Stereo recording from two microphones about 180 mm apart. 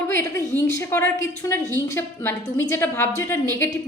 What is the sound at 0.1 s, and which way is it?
A woman's voice, 15° left (ahead or behind).